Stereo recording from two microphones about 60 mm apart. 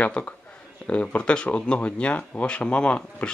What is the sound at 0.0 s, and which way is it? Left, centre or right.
Speech, left.